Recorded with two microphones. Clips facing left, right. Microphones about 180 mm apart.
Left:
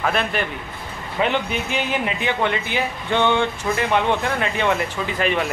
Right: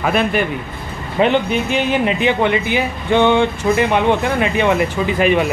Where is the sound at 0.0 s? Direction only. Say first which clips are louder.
Right 6 dB; 10° right (ahead or behind).